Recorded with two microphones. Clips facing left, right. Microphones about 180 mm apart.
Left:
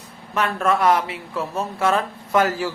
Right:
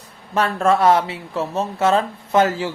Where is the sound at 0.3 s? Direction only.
30° right (ahead or behind).